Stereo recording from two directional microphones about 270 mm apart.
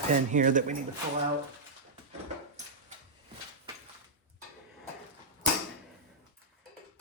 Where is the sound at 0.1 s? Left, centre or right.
Right.